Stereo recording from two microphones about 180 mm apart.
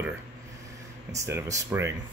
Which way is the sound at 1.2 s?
15° right (ahead or behind).